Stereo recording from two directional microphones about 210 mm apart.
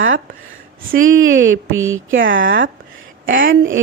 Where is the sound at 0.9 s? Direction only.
70° right (ahead or behind).